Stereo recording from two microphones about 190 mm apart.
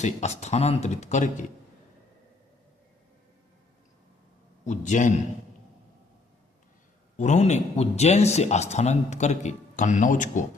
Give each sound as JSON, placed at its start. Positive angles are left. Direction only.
{"t": 0.0, "sound": "speech", "side_deg": 35}
{"t": 4.6, "sound": "speech", "side_deg": 40}
{"t": 7.2, "sound": "speech", "side_deg": 35}